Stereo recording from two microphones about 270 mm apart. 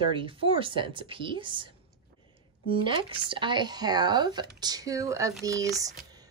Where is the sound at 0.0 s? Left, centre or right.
Centre.